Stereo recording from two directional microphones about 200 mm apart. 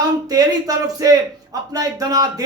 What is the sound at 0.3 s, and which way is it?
A man's voice, 15° right (ahead or behind).